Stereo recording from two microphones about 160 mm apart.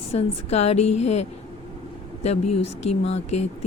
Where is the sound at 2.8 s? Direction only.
40° left (ahead or behind).